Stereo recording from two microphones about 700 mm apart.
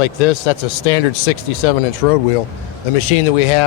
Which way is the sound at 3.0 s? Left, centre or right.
Left.